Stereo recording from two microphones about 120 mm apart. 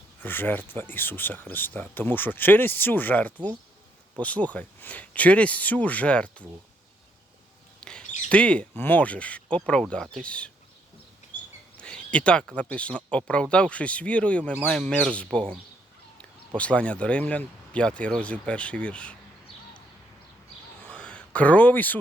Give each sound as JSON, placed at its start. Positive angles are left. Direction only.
{"t": 0.2, "sound": "speech", "side_deg": 15}
{"t": 7.8, "sound": "squawk", "side_deg": 5}
{"t": 8.3, "sound": "speech", "side_deg": 10}
{"t": 11.8, "sound": "speech", "side_deg": 10}
{"t": 16.6, "sound": "speech", "side_deg": 10}
{"t": 20.8, "sound": "a sound", "side_deg": 10}